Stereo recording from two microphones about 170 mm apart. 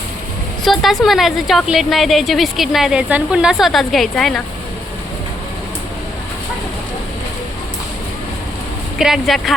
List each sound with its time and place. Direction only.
0.6 s a woman's voice: centre (ahead or behind)
9.0 s a woman's voice: centre (ahead or behind)